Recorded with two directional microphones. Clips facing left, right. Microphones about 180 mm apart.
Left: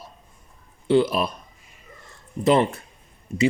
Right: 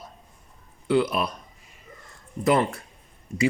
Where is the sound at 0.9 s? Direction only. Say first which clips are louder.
Left 3 dB; 25° left (ahead or behind).